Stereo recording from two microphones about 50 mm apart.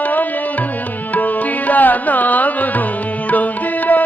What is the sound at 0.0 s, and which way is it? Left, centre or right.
Music, left.